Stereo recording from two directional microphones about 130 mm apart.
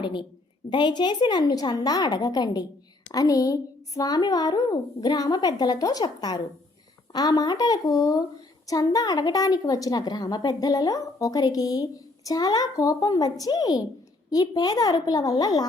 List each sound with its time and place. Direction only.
0.0 s a woman's voice: 40° left (ahead or behind)